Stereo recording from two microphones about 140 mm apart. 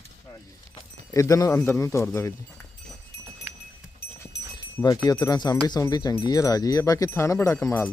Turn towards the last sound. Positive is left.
turn(degrees=20)  # may be behind; listen again after turning